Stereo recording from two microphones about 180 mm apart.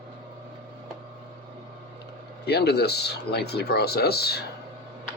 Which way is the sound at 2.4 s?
65° left (ahead or behind).